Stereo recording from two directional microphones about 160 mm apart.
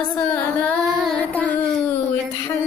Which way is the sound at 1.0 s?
10° left (ahead or behind).